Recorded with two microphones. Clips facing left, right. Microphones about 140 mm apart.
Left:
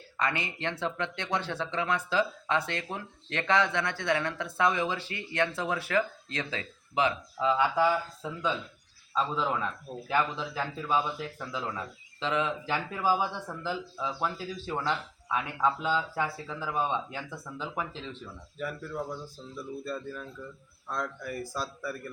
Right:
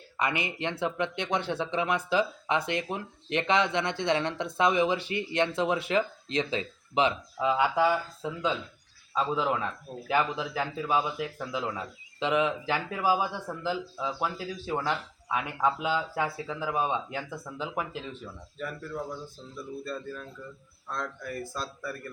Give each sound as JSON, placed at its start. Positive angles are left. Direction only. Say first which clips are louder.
{"t": 0.2, "sound": "speech", "louder": "right 2 dB", "side_deg": -15}
{"t": 18.5, "sound": "speech", "louder": "left 1 dB", "side_deg": 5}